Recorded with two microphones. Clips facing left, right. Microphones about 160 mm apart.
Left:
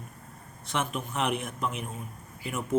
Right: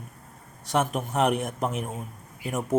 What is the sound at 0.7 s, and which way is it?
A man's voice, 40° right (ahead or behind).